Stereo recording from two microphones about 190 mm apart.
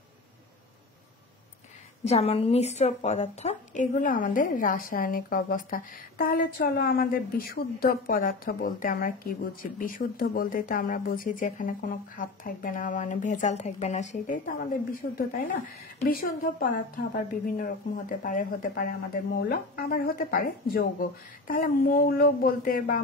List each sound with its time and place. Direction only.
2.0 s a woman's voice: 35° left (ahead or behind)